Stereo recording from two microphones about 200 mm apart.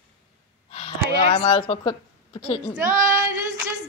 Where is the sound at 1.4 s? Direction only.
25° left (ahead or behind).